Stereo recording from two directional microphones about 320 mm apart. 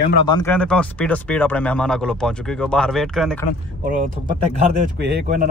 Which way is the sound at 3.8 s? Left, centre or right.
Right.